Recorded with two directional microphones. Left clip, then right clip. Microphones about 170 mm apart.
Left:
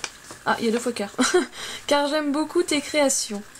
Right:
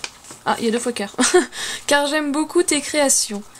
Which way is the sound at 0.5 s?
25° right (ahead or behind).